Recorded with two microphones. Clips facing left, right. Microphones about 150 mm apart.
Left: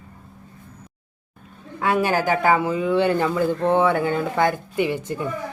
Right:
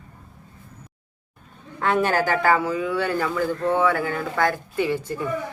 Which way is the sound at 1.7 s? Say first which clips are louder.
Even; 10° left (ahead or behind).